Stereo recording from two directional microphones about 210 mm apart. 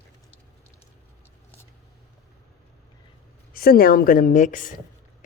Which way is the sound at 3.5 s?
45° left (ahead or behind).